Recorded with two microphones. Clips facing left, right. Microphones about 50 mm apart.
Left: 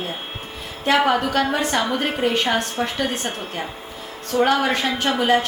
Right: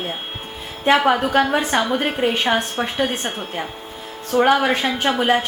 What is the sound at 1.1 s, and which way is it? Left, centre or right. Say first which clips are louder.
A woman's voice: right 3 dB; right.